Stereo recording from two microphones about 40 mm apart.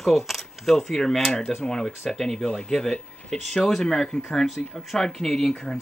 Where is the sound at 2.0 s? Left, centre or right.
Centre.